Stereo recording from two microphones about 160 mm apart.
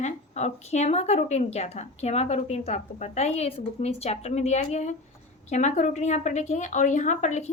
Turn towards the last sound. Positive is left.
turn(degrees=50)  # may be behind; listen again after turning